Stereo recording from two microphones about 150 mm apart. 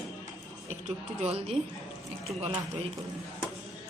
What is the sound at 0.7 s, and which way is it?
A woman's voice, 45° right (ahead or behind).